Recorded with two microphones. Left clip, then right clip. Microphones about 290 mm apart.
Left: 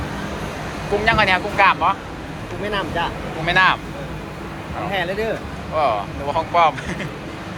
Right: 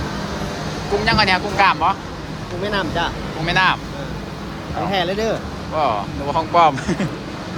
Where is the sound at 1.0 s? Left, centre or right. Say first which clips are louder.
Even; centre.